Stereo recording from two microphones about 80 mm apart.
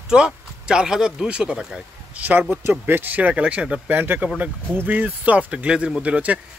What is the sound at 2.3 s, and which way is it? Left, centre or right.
Speech, right.